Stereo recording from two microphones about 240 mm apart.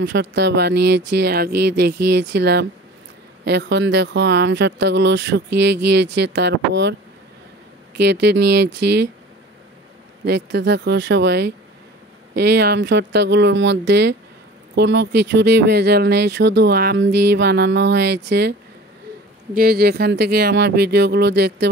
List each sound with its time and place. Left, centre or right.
0.0 s speech: right
8.0 s speech: right
10.2 s speech: right
19.5 s speech: right